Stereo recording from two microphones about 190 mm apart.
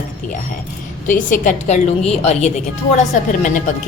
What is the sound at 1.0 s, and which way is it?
A woman's voice, 45° left (ahead or behind).